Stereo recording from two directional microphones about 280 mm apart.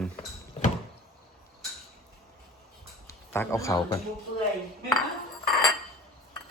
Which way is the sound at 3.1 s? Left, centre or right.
Centre.